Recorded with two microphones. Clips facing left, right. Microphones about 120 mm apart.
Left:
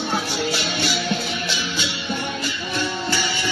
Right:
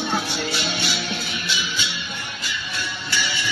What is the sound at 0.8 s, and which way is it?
Music, 90° left.